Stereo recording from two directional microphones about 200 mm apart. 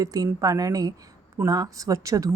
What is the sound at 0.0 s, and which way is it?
A woman's voice, 15° right (ahead or behind).